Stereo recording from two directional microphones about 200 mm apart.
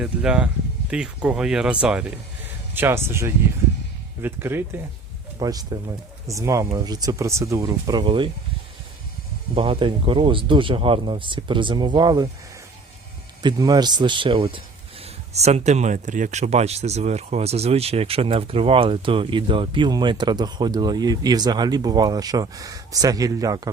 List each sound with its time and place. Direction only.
0.0 s speech: 5° right (ahead or behind); by 8.3 s 25° right (ahead or behind)
9.6 s speech: 25° right (ahead or behind)
13.4 s speech: 20° right (ahead or behind)